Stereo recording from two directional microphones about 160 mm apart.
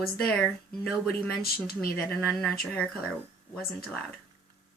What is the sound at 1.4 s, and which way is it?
Speech, 70° left (ahead or behind).